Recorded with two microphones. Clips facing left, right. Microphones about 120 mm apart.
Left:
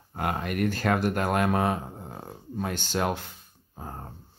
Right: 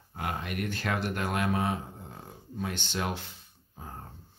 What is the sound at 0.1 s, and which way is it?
Speech, 55° left (ahead or behind).